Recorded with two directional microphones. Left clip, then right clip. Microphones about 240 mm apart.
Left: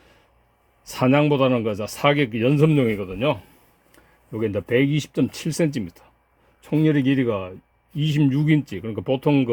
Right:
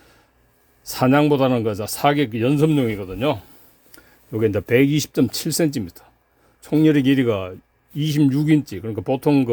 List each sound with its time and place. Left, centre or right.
0.9 s speech: centre
3.9 s speech: right